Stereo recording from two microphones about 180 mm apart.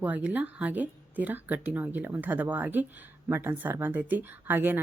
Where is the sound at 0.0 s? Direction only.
10° right (ahead or behind).